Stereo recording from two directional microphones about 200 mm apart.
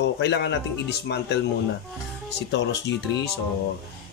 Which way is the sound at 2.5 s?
60° left (ahead or behind).